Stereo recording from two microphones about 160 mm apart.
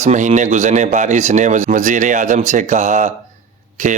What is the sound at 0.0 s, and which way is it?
A man's voice, 45° right (ahead or behind).